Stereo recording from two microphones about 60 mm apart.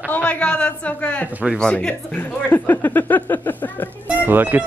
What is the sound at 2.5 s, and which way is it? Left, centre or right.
Speech, left.